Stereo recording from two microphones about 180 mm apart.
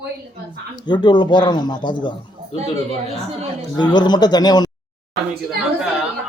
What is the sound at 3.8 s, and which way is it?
Speech, 25° left (ahead or behind).